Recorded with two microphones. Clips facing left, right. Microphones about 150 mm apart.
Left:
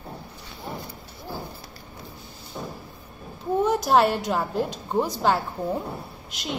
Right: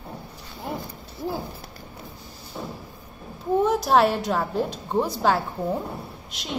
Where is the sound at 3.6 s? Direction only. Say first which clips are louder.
Even; centre (ahead or behind).